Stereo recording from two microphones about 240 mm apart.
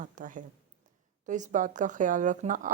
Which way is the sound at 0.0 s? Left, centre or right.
Right.